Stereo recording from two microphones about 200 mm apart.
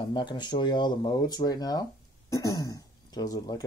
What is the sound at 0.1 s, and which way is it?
Speech, 20° left (ahead or behind).